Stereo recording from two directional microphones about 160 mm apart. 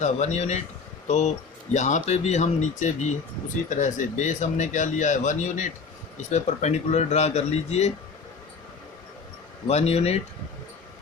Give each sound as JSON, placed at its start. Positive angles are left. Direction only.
{"t": 0.0, "sound": "speech", "side_deg": 45}
{"t": 9.6, "sound": "speech", "side_deg": 40}